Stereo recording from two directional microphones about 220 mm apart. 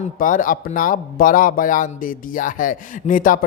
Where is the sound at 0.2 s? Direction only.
35° left (ahead or behind).